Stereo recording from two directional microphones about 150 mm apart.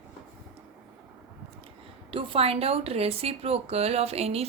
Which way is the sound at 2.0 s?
35° right (ahead or behind).